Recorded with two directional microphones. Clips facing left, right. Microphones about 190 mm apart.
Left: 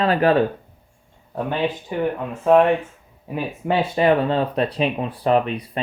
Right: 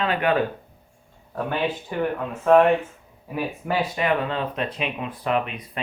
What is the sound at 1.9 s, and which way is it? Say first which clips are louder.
Speech: left 2 dB; 15° left (ahead or behind).